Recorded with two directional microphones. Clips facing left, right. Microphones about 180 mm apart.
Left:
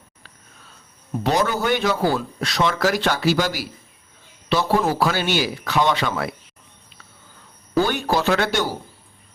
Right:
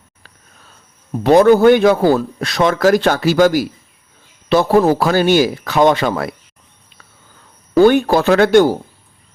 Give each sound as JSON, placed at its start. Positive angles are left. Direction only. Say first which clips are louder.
{"t": 1.2, "sound": "speech", "louder": "right 13 dB", "side_deg": -55}
{"t": 4.8, "sound": "speech", "louder": "right 8 dB", "side_deg": -45}
{"t": 7.8, "sound": "speech", "louder": "right 10 dB", "side_deg": -55}